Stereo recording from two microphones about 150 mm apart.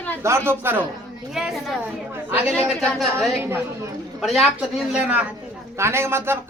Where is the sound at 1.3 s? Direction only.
Centre (ahead or behind).